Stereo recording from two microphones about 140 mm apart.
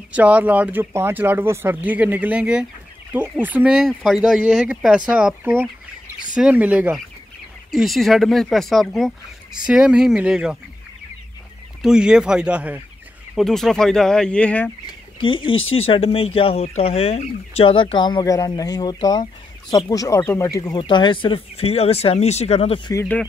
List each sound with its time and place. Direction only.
0.1 s speech: 10° right (ahead or behind)
7.7 s speech: centre (ahead or behind)
11.8 s speech: 5° right (ahead or behind)
13.3 s speech: centre (ahead or behind)
15.1 s speech: 35° left (ahead or behind)
20.8 s speech: 35° left (ahead or behind)